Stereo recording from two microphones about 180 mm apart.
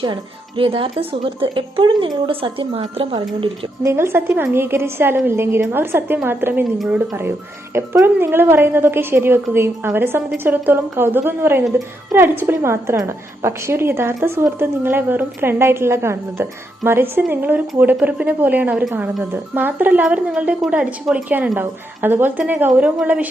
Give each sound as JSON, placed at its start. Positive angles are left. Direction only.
{"t": 0.0, "sound": "speech", "side_deg": -25}
{"t": 3.8, "sound": "a woman's voice", "side_deg": -15}